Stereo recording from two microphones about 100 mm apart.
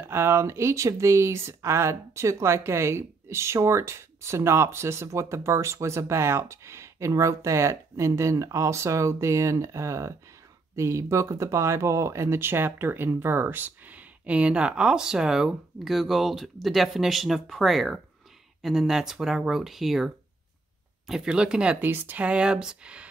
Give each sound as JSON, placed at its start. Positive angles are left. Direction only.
{"t": 0.0, "sound": "speech", "side_deg": -25}
{"t": 21.1, "sound": "speech", "side_deg": -5}